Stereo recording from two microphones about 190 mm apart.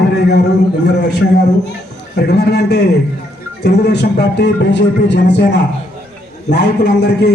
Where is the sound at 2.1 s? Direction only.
60° left (ahead or behind).